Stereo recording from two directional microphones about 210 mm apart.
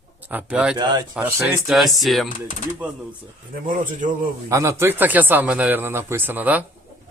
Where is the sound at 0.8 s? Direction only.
20° right (ahead or behind).